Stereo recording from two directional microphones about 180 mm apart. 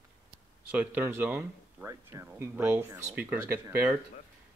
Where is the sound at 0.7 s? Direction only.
10° right (ahead or behind).